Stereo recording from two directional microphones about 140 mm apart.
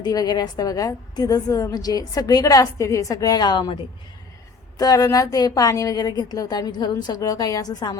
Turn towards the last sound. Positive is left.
turn(degrees=30)  # may be behind; listen again after turning